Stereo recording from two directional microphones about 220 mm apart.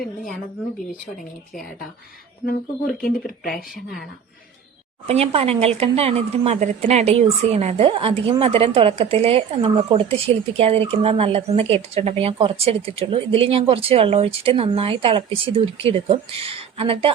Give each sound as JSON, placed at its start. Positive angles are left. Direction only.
{"t": 2.5, "sound": "speech", "side_deg": 40}
{"t": 5.0, "sound": "speech", "side_deg": -30}